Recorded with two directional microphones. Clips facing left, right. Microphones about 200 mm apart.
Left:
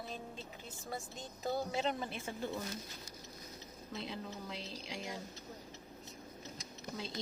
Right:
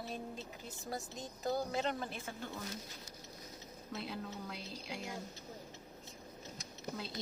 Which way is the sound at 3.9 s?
Centre (ahead or behind).